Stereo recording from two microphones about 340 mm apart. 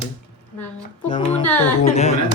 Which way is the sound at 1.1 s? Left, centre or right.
Centre.